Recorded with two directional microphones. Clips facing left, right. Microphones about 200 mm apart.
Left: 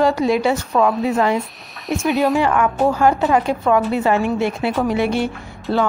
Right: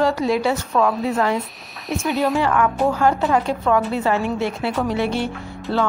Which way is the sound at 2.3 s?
15° left (ahead or behind).